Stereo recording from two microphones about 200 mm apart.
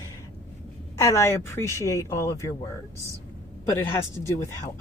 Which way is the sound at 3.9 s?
15° left (ahead or behind).